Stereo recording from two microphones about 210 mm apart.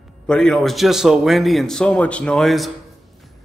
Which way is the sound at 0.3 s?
Centre (ahead or behind).